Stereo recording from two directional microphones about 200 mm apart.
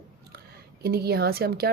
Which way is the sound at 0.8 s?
50° right (ahead or behind).